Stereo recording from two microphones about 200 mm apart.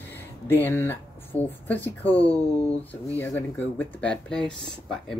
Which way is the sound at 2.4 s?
30° left (ahead or behind).